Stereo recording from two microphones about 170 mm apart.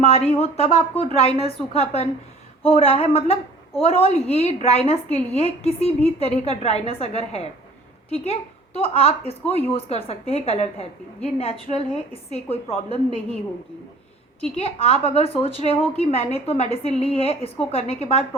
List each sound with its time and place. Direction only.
0.0 s a woman's voice: 35° left (ahead or behind)
14.5 s a woman's voice: 35° left (ahead or behind)